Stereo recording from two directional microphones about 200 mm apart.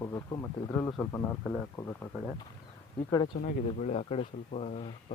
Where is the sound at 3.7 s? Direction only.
35° left (ahead or behind).